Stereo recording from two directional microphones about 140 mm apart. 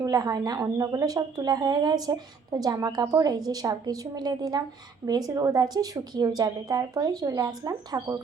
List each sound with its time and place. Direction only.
0.0 s a woman's voice: 25° right (ahead or behind)